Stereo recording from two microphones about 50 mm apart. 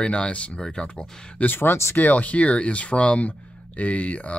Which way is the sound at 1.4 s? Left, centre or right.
Left.